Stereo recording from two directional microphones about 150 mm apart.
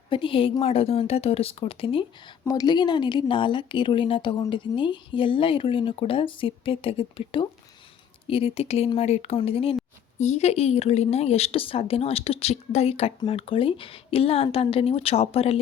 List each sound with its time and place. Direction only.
0.1 s a woman's voice: 35° left (ahead or behind)
2.4 s a woman's voice: 25° left (ahead or behind); by 15.5 s 40° left (ahead or behind)